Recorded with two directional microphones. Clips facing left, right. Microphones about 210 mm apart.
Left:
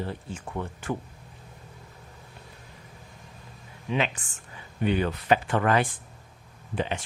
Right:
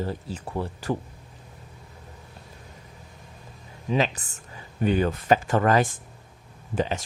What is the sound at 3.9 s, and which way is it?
Speech, 40° right (ahead or behind).